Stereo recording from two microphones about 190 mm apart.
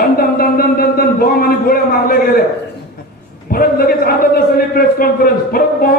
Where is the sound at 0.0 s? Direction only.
50° left (ahead or behind).